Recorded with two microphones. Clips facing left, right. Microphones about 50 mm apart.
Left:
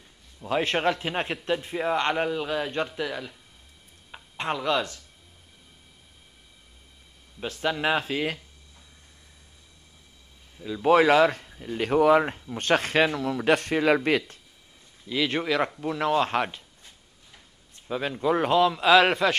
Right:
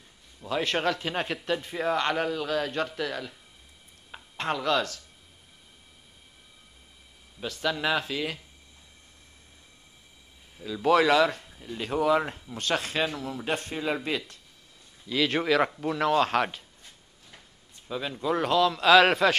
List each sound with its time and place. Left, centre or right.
0.5 s a man's voice: left
7.3 s a man's voice: left
10.6 s speech: centre
10.9 s a man's voice: left
11.4 s a sound: left
11.7 s speech: left
15.0 s speech: centre
17.8 s a man's voice: left
18.7 s speech: centre